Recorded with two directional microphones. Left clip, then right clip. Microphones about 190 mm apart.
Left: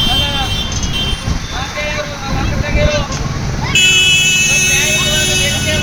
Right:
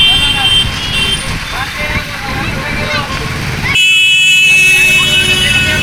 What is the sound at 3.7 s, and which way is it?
Vehicle, 40° left (ahead or behind).